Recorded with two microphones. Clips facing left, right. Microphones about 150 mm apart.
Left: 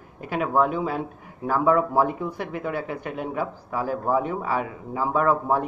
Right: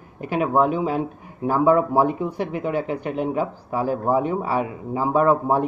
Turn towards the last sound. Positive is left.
turn(degrees=-25)  # may be behind; listen again after turning